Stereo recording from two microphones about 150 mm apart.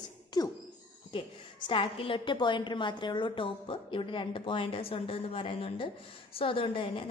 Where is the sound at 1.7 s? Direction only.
35° left (ahead or behind).